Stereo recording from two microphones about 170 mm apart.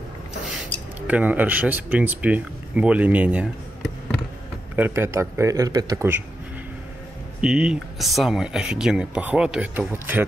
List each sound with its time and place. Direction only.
1.0 s speech: 10° right (ahead or behind)
7.4 s speech: 5° right (ahead or behind)